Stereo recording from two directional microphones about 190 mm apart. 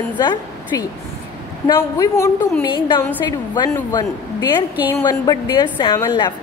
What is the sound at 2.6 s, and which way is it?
A woman's voice, 25° left (ahead or behind).